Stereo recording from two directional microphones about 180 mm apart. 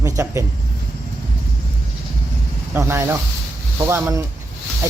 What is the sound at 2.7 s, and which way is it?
Speech, 15° right (ahead or behind).